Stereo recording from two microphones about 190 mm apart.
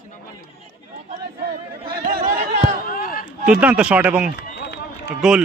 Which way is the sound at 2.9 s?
50° left (ahead or behind).